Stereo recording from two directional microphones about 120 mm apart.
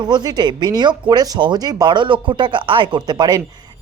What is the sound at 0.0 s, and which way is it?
Speech, 35° right (ahead or behind).